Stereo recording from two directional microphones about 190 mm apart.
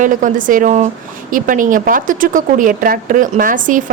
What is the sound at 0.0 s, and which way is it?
Speech, 45° right (ahead or behind).